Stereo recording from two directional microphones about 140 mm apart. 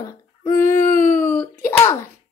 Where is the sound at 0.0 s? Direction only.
20° left (ahead or behind).